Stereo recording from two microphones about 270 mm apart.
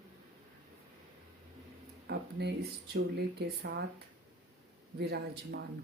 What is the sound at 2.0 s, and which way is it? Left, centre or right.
Speech, right.